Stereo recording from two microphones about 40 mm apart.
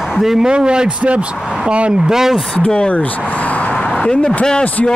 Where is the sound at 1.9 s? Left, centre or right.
Centre.